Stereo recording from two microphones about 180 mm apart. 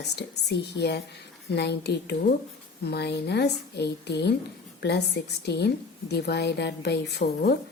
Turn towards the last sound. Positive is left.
turn(degrees=65)  # may be behind; listen again after turning